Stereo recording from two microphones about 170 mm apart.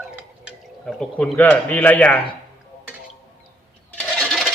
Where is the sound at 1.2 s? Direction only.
10° left (ahead or behind).